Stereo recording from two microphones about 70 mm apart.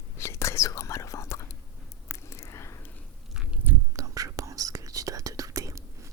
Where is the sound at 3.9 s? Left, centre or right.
Right.